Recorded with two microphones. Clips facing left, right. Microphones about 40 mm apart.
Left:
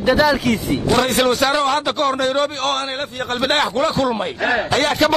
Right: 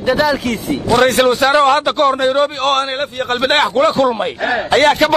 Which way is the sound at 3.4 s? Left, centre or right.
Right.